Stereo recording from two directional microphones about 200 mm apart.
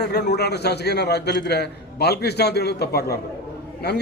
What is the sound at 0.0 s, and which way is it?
A man's voice, 55° left (ahead or behind).